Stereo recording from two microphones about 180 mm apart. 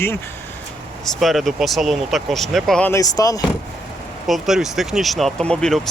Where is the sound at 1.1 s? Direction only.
Centre (ahead or behind).